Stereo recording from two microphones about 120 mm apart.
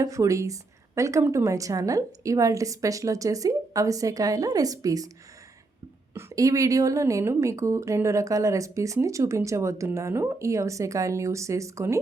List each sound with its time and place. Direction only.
0.0 s a woman's voice: 25° right (ahead or behind)
6.1 s a woman's voice: 25° right (ahead or behind)